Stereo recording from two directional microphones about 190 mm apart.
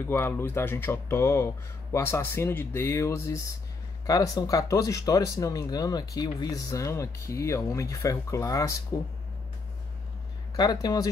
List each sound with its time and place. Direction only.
0.1 s speech: 10° left (ahead or behind)
10.5 s speech: 20° left (ahead or behind)